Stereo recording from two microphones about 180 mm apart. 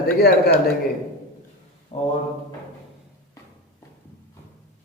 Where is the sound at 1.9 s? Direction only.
45° left (ahead or behind).